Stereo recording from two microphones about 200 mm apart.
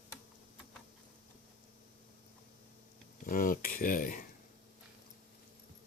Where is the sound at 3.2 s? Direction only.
45° left (ahead or behind).